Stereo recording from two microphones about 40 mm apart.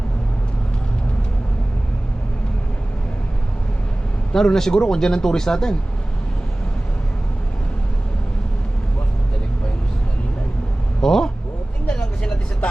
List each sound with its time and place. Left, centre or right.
4.3 s speech: centre
11.0 s a sound: centre
11.9 s vehicle: left